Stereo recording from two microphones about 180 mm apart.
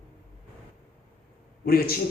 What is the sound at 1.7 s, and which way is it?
Speech, 55° left (ahead or behind).